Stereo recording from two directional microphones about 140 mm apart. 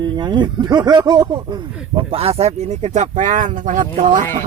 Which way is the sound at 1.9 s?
45° right (ahead or behind).